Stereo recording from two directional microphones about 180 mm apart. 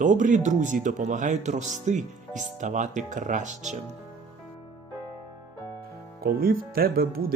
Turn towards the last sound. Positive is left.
turn(degrees=-55)  # may be behind; listen again after turning